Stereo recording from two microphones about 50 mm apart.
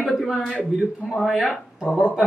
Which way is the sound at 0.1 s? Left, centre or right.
Centre.